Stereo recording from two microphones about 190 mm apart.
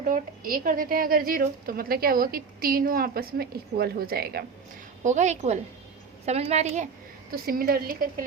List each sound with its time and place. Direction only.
0.0 s a woman's voice: 45° right (ahead or behind)
5.0 s a woman's voice: 40° right (ahead or behind)
7.3 s a woman's voice: 50° right (ahead or behind)